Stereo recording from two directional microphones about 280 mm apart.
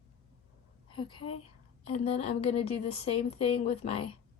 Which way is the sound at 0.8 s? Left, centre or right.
Centre.